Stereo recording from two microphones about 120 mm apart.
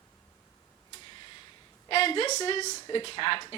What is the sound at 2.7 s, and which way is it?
Speech, 40° left (ahead or behind).